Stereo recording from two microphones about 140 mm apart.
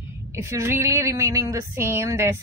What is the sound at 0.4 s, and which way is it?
Speech, 20° right (ahead or behind).